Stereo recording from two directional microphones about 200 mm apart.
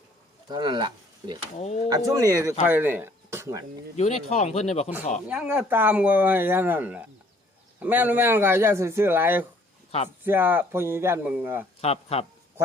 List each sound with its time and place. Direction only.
0.4 s speech: 20° right (ahead or behind)
1.6 s speech: 35° left (ahead or behind)
2.0 s speech: 15° right (ahead or behind)
3.9 s speech: 35° left (ahead or behind)
5.3 s speech: 5° right (ahead or behind)
11.8 s speech: 30° left (ahead or behind)